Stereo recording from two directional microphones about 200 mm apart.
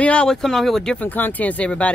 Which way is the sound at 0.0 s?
5° left (ahead or behind).